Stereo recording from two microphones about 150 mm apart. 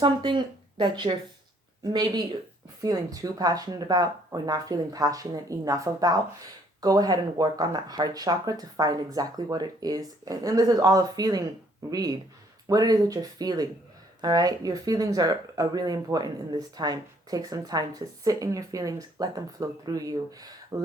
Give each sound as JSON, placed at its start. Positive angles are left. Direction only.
{"t": 0.0, "sound": "speech", "side_deg": -30}